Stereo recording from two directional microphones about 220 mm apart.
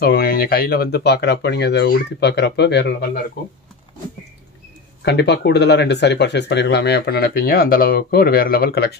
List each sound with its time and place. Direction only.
0.0 s speech: 45° left (ahead or behind)
5.0 s speech: 50° left (ahead or behind)